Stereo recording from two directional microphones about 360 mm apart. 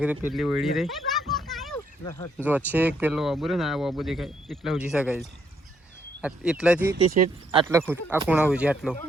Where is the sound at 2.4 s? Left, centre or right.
Centre.